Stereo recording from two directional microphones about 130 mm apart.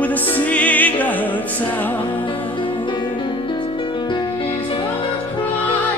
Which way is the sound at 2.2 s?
40° left (ahead or behind).